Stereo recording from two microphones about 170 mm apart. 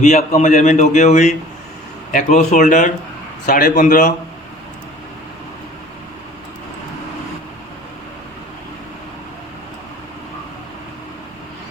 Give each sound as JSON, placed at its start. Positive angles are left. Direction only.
{"t": 0.0, "sound": "a man's voice", "side_deg": 40}